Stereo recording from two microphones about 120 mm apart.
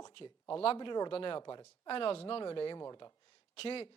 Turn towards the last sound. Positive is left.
turn(degrees=55)  # may be behind; listen again after turning